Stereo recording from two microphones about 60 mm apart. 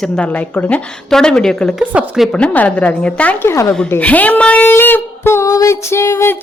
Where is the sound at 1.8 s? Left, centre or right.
Right.